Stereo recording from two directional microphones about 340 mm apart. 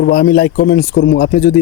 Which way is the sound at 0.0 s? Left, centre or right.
Left.